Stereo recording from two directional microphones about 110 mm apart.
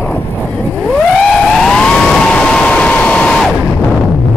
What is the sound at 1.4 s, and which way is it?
Vehicle, 5° left (ahead or behind).